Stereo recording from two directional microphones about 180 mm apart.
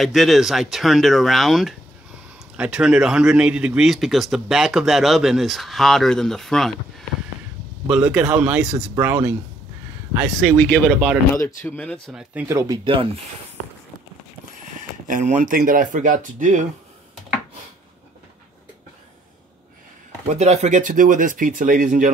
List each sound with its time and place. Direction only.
0.0 s speech: centre (ahead or behind)
8.7 s speech: 15° right (ahead or behind)
10.4 s speech: centre (ahead or behind)
11.3 s speech: 10° left (ahead or behind)
12.1 s speech: 5° right (ahead or behind)
12.4 s speech: 15° right (ahead or behind)
15.0 s speech: 45° right (ahead or behind)
20.2 s speech: 40° right (ahead or behind)